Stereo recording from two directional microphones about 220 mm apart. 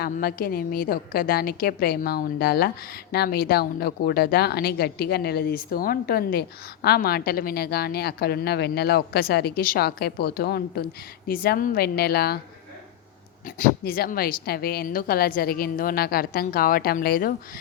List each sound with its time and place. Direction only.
0.0 s a woman's voice: 45° left (ahead or behind)
13.4 s a woman's voice: 40° left (ahead or behind)